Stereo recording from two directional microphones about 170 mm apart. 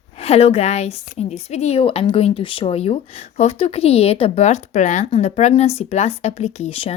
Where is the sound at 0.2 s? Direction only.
35° left (ahead or behind).